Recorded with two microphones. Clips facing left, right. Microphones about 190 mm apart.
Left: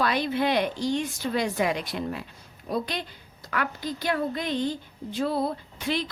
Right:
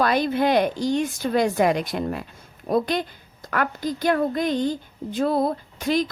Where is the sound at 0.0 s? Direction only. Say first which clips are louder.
Right 4 dB; 45° right (ahead or behind).